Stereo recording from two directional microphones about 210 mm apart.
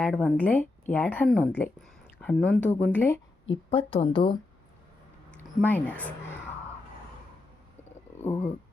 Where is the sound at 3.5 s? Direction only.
25° left (ahead or behind).